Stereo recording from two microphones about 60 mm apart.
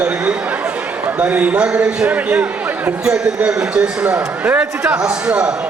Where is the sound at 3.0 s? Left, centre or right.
Centre.